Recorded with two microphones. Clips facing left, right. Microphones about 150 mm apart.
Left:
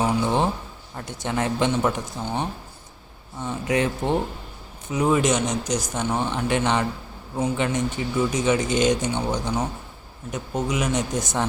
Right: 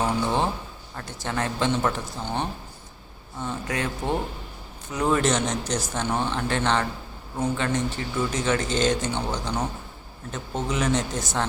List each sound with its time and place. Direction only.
0.0 s a sound: 15° left (ahead or behind)
0.9 s speech: 20° left (ahead or behind)
3.7 s speech: 20° left (ahead or behind)